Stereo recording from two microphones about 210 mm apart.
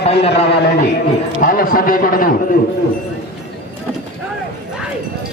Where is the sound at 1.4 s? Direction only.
45° left (ahead or behind).